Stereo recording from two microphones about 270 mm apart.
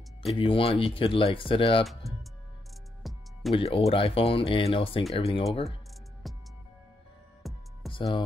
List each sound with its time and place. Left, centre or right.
0.3 s speech: centre
3.0 s music: centre
3.5 s speech: left
6.2 s music: centre
7.4 s music: centre
7.9 s music: centre